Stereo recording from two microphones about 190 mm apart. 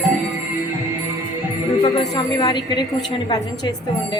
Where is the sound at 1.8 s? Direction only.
20° left (ahead or behind).